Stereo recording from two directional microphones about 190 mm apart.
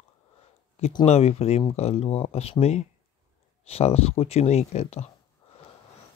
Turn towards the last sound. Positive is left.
turn(degrees=35)  # may be behind; listen again after turning